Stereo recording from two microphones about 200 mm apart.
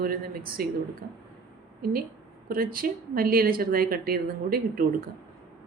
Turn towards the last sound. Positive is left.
turn(degrees=-50)  # may be behind; listen again after turning